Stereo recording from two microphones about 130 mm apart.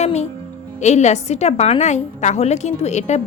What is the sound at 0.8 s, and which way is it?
Speech, 60° left (ahead or behind).